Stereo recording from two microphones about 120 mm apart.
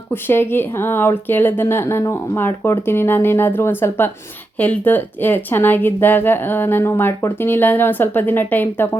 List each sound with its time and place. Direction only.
0.1 s speech: 20° left (ahead or behind)